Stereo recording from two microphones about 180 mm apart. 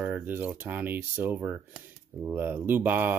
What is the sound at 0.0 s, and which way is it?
Speech, 10° right (ahead or behind).